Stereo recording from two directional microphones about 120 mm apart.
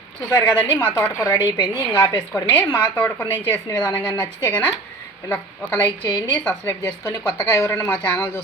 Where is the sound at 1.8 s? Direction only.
15° left (ahead or behind).